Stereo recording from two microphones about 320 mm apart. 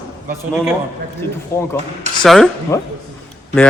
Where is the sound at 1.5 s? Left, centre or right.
Centre.